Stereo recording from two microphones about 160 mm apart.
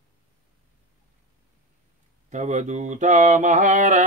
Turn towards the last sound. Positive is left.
turn(degrees=-50)  # may be behind; listen again after turning